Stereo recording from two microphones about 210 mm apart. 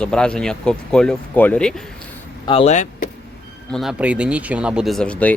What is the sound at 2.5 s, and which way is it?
Speech, 30° left (ahead or behind).